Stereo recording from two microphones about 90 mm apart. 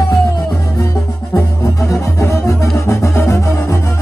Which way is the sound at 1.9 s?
35° left (ahead or behind).